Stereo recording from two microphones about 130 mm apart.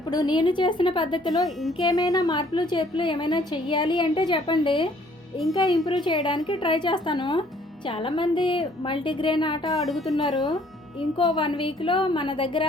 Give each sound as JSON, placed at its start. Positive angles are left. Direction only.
{"t": 0.1, "sound": "a woman's voice", "side_deg": 35}
{"t": 9.8, "sound": "a woman's voice", "side_deg": 0}
{"t": 10.2, "sound": "a woman's voice", "side_deg": 30}